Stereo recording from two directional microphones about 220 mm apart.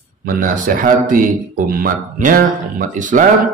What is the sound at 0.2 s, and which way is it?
A man's voice, 40° right (ahead or behind).